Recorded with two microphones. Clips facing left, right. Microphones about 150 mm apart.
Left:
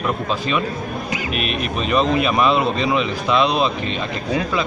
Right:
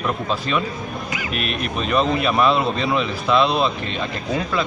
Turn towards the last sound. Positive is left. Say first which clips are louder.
# even
turn(degrees=10)  # may be behind; listen again after turning